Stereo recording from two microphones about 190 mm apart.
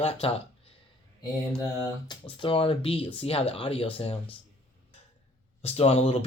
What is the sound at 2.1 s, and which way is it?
Speech, 25° left (ahead or behind).